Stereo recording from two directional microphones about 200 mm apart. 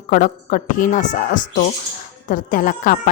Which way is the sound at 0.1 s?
40° left (ahead or behind).